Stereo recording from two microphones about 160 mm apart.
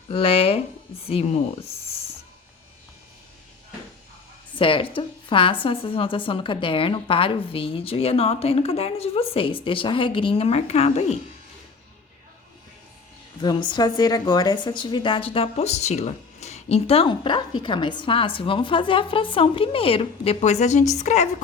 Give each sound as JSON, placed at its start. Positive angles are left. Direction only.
{"t": 0.1, "sound": "a woman's voice", "side_deg": 35}
{"t": 4.5, "sound": "a woman's voice", "side_deg": 30}
{"t": 13.4, "sound": "a woman's voice", "side_deg": 30}